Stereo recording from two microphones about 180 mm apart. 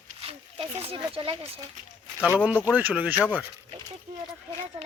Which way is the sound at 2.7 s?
10° right (ahead or behind).